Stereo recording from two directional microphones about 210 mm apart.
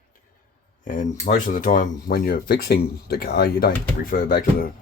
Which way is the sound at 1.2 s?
40° left (ahead or behind).